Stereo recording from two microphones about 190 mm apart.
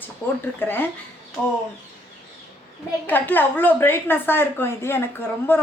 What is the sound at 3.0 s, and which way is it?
Speech, 10° left (ahead or behind).